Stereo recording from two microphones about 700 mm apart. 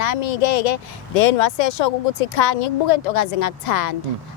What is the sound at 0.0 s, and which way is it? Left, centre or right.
Speech, left.